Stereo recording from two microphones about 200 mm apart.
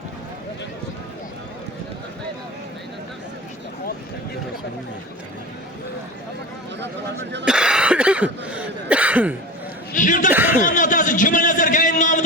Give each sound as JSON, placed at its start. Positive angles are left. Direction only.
{"t": 6.8, "sound": "speech", "side_deg": -60}
{"t": 7.4, "sound": "cough", "side_deg": -5}
{"t": 9.9, "sound": "a man's voice", "side_deg": 40}
{"t": 10.3, "sound": "speech", "side_deg": -10}
{"t": 10.6, "sound": "a sound", "side_deg": 40}